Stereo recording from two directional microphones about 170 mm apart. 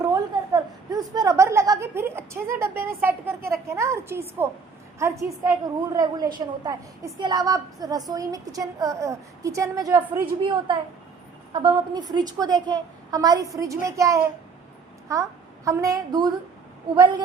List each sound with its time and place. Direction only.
0.1 s a sound: 20° right (ahead or behind)
2.6 s a woman's voice: 15° right (ahead or behind)
11.5 s a woman's voice: 25° right (ahead or behind)